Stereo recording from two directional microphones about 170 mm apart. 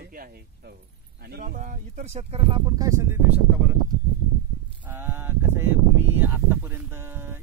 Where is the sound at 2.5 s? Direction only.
20° right (ahead or behind); by 3.7 s 5° right (ahead or behind).